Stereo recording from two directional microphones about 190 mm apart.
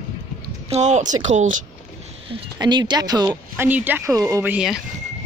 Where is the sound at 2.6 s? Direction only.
20° right (ahead or behind).